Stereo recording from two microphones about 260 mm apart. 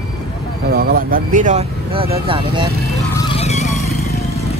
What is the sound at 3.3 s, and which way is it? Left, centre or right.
Vehicle, left.